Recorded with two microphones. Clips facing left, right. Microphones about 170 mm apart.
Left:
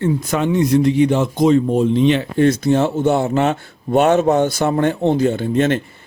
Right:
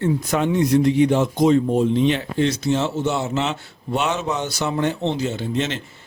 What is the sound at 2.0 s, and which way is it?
Speech, 65° left (ahead or behind).